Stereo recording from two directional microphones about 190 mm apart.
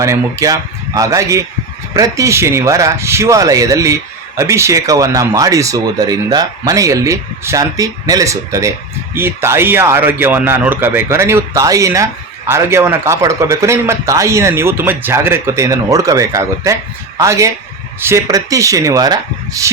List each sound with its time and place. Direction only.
0.0 s speech: 15° right (ahead or behind)